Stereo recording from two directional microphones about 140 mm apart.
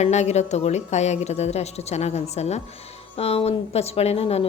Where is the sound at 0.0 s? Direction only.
55° left (ahead or behind).